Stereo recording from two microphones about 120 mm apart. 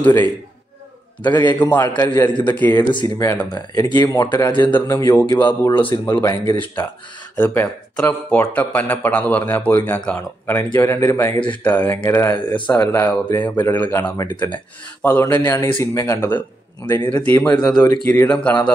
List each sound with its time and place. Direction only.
0.0 s a man's voice: 15° left (ahead or behind)
1.2 s speech: 40° left (ahead or behind)
2.6 s a man's voice: 15° left (ahead or behind)
2.9 s speech: 35° left (ahead or behind)
4.6 s a man's voice: 15° left (ahead or behind)
4.9 s speech: 25° left (ahead or behind)
6.2 s a man's voice: 20° left (ahead or behind)
17.6 s speech: 35° left (ahead or behind)
18.0 s a man's voice: 15° left (ahead or behind)